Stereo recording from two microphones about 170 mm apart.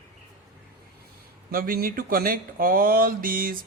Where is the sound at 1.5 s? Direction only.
60° right (ahead or behind).